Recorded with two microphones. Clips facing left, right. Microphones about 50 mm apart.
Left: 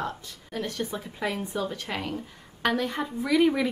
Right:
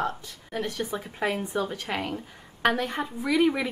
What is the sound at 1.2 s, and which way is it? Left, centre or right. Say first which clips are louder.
Speech: right 2 dB; right.